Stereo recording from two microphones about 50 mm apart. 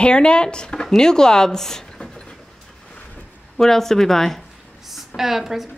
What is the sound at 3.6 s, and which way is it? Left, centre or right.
Speech, centre.